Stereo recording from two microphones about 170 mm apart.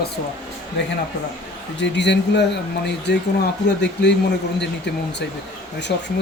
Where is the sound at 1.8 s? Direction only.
90° left.